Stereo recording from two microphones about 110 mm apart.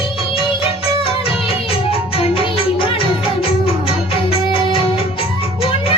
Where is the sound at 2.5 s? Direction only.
55° left (ahead or behind).